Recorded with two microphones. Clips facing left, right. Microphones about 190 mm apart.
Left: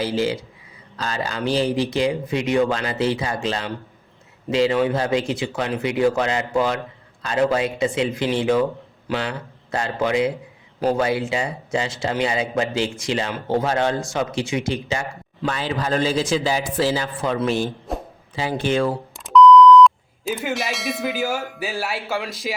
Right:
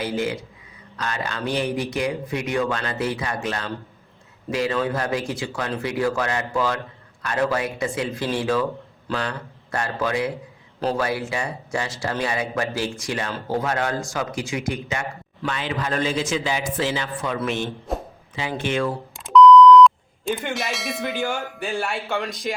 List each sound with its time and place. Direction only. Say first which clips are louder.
0.9 s a man's voice: left 2 dB; 30° left (ahead or behind)
17.9 s a sound: right 1 dB; centre (ahead or behind)
18.3 s a man's voice: left 3 dB; 35° left (ahead or behind)
19.1 s speech: even; centre (ahead or behind)